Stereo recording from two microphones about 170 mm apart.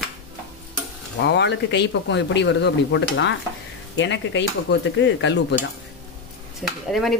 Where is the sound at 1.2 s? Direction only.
90° left.